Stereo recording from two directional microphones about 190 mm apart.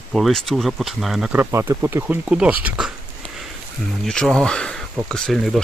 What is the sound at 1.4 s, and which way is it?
Speech, 15° right (ahead or behind).